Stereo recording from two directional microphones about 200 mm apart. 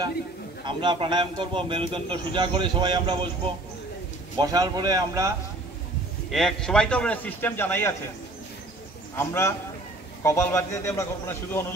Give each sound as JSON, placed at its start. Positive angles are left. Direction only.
{"t": 0.7, "sound": "a man's voice", "side_deg": -25}
{"t": 6.3, "sound": "a man's voice", "side_deg": 0}
{"t": 9.1, "sound": "a man's voice", "side_deg": 10}